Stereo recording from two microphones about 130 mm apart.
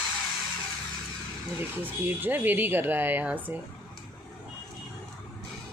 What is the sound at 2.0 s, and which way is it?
A woman's voice, 15° right (ahead or behind).